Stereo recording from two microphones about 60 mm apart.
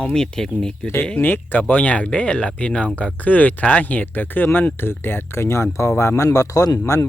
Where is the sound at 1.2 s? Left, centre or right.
Left.